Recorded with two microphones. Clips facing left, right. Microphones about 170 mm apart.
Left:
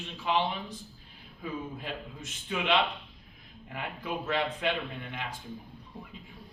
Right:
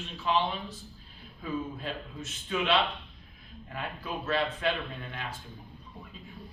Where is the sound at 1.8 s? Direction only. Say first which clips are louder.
Right 2 dB; 15° left (ahead or behind).